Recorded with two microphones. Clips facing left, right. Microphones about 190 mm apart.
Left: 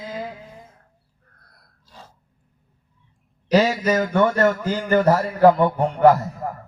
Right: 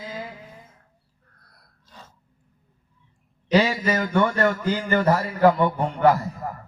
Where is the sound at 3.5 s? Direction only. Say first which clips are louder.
Left 3 dB; 40° left (ahead or behind).